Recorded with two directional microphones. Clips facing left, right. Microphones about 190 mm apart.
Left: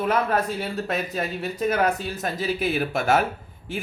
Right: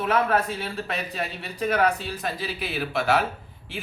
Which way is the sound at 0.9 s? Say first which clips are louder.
Left 4 dB; 45° left (ahead or behind).